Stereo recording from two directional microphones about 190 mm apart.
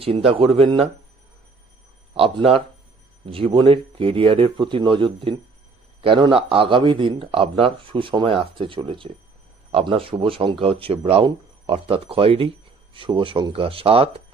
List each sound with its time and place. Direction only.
0.0 s speech: 30° right (ahead or behind)
2.1 s speech: 30° right (ahead or behind)